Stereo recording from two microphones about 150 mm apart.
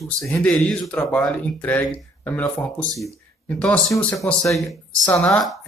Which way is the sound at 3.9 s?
20° left (ahead or behind).